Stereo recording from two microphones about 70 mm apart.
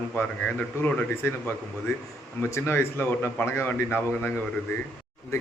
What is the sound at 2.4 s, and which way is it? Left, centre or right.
Speech, left.